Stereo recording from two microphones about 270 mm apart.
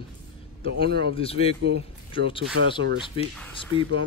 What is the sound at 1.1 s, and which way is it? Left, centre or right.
Speech, left.